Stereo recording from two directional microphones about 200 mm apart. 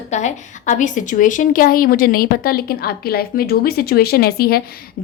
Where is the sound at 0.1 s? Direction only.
35° left (ahead or behind).